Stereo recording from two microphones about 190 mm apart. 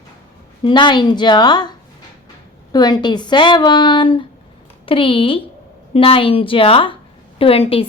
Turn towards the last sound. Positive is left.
turn(degrees=30)  # may be behind; listen again after turning